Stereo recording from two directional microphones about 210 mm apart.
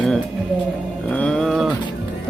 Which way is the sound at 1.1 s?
5° left (ahead or behind).